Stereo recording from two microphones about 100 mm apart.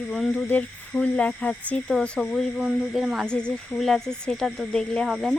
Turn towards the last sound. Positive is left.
turn(degrees=5)  # may be behind; listen again after turning